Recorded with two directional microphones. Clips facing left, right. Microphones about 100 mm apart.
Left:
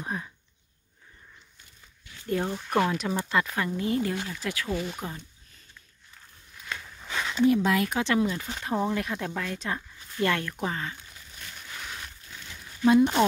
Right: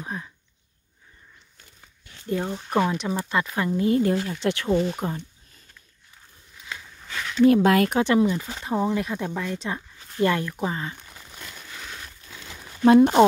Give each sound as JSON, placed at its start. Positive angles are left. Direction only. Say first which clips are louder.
{"t": 0.0, "sound": "speech", "louder": "even", "side_deg": 5}
{"t": 2.3, "sound": "speech", "louder": "right 2 dB", "side_deg": -5}
{"t": 3.8, "sound": "speech", "louder": "right 8 dB", "side_deg": -40}
{"t": 4.3, "sound": "speech", "louder": "right 8 dB", "side_deg": -25}
{"t": 7.1, "sound": "a sound", "louder": "right 4 dB", "side_deg": 15}
{"t": 7.4, "sound": "speech", "louder": "right 6 dB", "side_deg": -65}
{"t": 7.9, "sound": "speech", "louder": "right 5 dB", "side_deg": -20}
{"t": 12.8, "sound": "speech", "louder": "right 5 dB", "side_deg": -60}